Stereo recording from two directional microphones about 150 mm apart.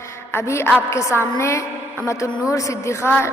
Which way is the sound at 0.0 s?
20° left (ahead or behind).